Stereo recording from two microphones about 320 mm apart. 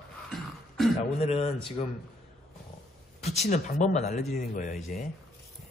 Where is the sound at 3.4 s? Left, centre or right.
Left.